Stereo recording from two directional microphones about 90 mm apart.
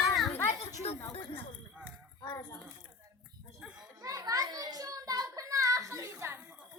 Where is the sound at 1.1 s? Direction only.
90° left.